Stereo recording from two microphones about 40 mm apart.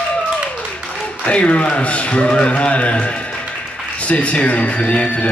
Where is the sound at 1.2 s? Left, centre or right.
Left.